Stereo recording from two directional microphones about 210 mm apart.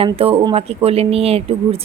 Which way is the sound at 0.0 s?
25° right (ahead or behind).